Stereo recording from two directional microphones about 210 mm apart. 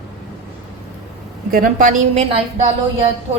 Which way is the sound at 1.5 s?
40° right (ahead or behind).